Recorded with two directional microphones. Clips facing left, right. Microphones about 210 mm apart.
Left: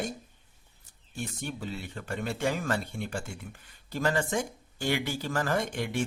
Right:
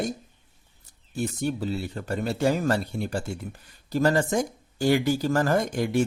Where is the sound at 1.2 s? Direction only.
40° right (ahead or behind).